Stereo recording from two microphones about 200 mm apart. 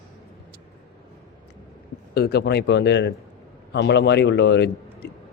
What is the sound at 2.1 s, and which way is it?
Speech, 55° left (ahead or behind).